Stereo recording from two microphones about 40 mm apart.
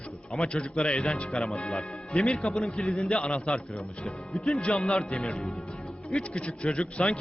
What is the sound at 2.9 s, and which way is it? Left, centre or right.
Speech, left.